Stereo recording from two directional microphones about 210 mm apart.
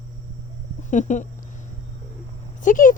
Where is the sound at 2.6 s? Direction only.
40° left (ahead or behind).